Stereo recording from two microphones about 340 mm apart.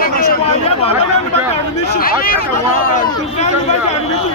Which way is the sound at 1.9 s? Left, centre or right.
Left.